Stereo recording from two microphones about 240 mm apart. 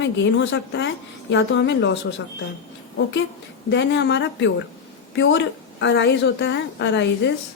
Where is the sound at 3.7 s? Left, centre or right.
Left.